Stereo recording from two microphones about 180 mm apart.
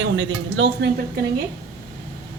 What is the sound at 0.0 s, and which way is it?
Speech, 90° right.